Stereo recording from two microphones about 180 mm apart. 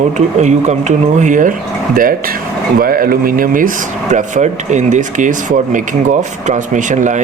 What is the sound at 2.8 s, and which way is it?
Speech, 55° right (ahead or behind).